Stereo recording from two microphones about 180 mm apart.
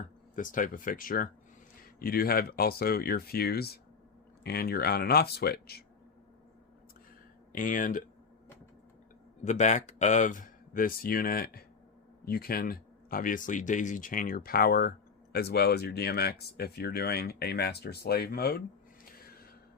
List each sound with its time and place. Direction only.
0.3 s speech: 50° left (ahead or behind)
7.5 s speech: 50° left (ahead or behind)
9.4 s speech: 40° left (ahead or behind); by 18.6 s 60° left (ahead or behind)